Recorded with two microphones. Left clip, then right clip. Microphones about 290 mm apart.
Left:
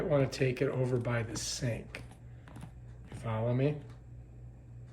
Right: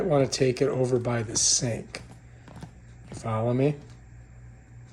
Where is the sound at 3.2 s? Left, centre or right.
Centre.